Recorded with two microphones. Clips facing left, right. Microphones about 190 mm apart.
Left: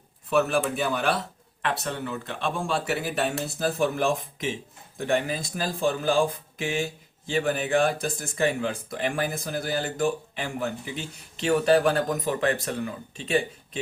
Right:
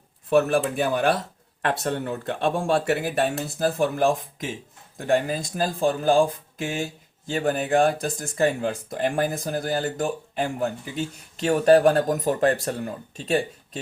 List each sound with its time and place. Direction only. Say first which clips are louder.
0.3 s speech: right 3 dB; 50° right (ahead or behind)